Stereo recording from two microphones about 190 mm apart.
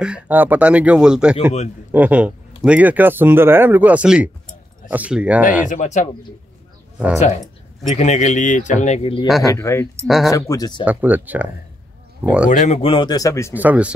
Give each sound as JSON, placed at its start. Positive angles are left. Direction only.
{"t": 0.0, "sound": "speech", "side_deg": -5}
{"t": 5.7, "sound": "a man's voice", "side_deg": 40}
{"t": 7.8, "sound": "a man's voice", "side_deg": 35}
{"t": 9.4, "sound": "speech", "side_deg": 15}
{"t": 10.0, "sound": "speech", "side_deg": 0}
{"t": 10.5, "sound": "speech", "side_deg": 20}
{"t": 10.8, "sound": "speech", "side_deg": -10}
{"t": 12.4, "sound": "speech", "side_deg": 40}
{"t": 13.6, "sound": "speech", "side_deg": -5}